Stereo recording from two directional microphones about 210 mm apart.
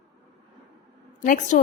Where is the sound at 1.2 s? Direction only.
40° left (ahead or behind).